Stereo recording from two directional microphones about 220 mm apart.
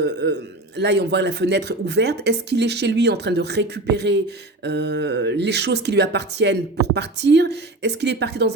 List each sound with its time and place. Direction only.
0.0 s speech: 50° right (ahead or behind)